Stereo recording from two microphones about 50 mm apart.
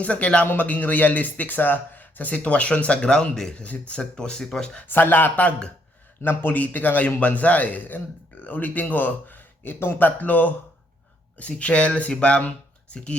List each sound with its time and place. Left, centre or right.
0.0 s a man's voice: left; by 3.5 s centre
3.5 s speech: left
4.9 s a man's voice: left